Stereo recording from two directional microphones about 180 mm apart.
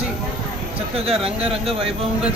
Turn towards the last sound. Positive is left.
turn(degrees=-35)  # may be behind; listen again after turning